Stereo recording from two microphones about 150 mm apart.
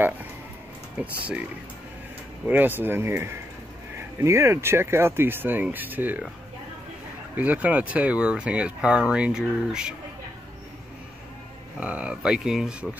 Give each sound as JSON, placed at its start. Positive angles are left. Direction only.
{"t": 2.4, "sound": "speech", "side_deg": -10}
{"t": 7.3, "sound": "speech", "side_deg": -10}
{"t": 11.8, "sound": "speech", "side_deg": -10}